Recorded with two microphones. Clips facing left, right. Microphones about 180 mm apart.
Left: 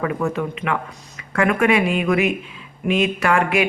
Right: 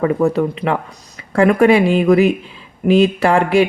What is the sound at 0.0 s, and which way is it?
Speech, 35° right (ahead or behind).